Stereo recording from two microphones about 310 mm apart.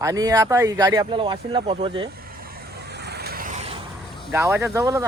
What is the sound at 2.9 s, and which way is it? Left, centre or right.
Vehicle, right.